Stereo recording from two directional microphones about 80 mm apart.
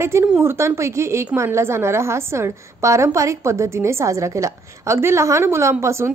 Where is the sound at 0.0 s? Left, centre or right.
Right.